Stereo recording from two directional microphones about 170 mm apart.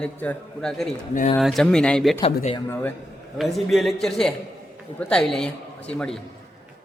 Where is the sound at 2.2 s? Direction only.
40° left (ahead or behind).